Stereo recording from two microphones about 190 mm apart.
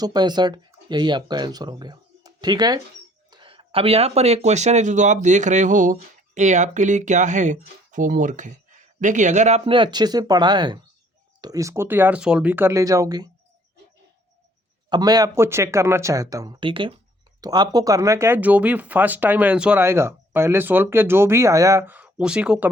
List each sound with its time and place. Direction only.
0.0 s speech: 20° right (ahead or behind)
14.8 s speech: 20° right (ahead or behind)